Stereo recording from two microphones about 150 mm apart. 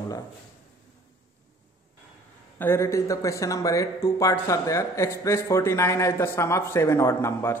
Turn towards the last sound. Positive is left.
turn(degrees=15)  # may be behind; listen again after turning